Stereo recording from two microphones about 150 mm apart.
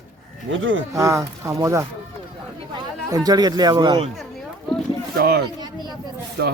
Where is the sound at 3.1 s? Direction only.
25° right (ahead or behind).